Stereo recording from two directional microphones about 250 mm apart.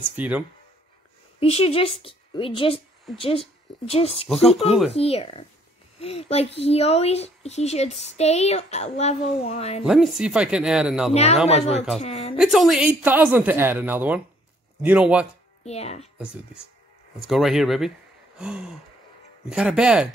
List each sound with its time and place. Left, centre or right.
0.1 s a woman's voice: centre
1.4 s a woman's voice: left
4.3 s speech: centre
4.9 s speech: left
9.8 s speech: centre
12.0 s speech: left
12.4 s a woman's voice: centre
15.6 s speech: left
17.2 s speech: centre